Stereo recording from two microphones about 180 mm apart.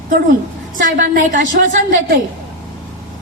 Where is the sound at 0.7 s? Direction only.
50° right (ahead or behind).